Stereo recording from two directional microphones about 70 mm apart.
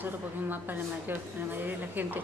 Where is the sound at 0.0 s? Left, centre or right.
Right.